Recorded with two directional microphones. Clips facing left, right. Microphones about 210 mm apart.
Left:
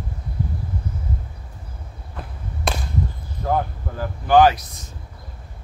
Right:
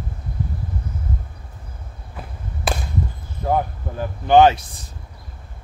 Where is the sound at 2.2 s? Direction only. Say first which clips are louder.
Even; 5° right (ahead or behind).